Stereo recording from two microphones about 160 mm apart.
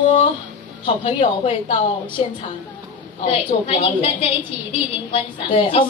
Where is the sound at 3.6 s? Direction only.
35° left (ahead or behind).